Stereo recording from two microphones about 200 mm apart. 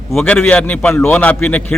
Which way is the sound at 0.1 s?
Centre (ahead or behind).